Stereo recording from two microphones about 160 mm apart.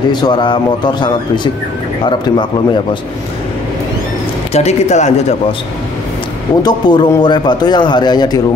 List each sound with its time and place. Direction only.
0.1 s a man's voice: 25° left (ahead or behind)
4.6 s speech: 45° left (ahead or behind)
6.6 s a man's voice: 25° left (ahead or behind)